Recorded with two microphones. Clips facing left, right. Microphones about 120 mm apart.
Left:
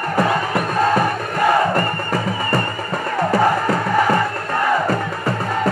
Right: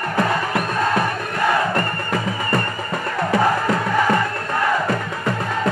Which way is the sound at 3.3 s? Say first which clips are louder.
Left 1 dB; 5° left (ahead or behind).